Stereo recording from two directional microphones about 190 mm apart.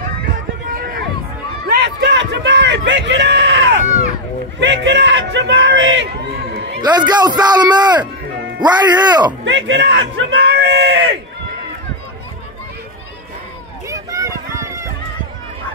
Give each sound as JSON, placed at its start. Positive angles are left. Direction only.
{"t": 0.7, "sound": "run", "side_deg": -50}
{"t": 1.7, "sound": "bellow", "side_deg": -65}
{"t": 4.6, "sound": "speech", "side_deg": -70}
{"t": 6.8, "sound": "a man's voice", "side_deg": -20}
{"t": 9.4, "sound": "speech", "side_deg": -75}
{"t": 13.8, "sound": "run", "side_deg": -15}